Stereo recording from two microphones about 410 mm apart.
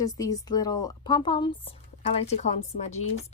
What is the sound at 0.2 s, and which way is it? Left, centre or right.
Speech, centre.